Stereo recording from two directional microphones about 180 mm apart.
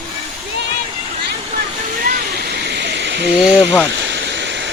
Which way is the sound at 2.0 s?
60° right (ahead or behind).